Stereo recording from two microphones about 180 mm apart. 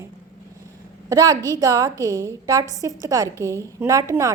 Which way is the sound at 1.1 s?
20° right (ahead or behind).